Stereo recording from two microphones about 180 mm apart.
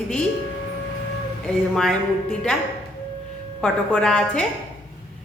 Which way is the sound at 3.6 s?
5° left (ahead or behind).